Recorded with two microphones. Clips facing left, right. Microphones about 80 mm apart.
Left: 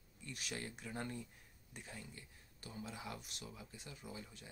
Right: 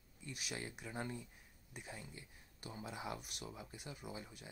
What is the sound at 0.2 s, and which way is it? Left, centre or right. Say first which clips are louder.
Speech: even; centre.